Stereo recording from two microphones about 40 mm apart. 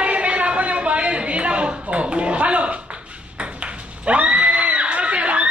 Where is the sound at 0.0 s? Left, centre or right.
Right.